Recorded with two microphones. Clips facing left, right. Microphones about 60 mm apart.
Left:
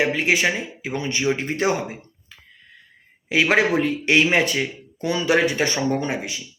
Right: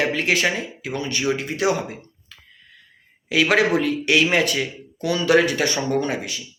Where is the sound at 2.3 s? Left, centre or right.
Left.